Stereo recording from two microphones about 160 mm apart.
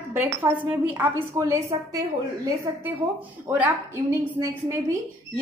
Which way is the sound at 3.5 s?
15° right (ahead or behind).